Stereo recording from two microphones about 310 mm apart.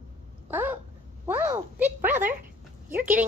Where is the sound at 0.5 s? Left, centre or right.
Centre.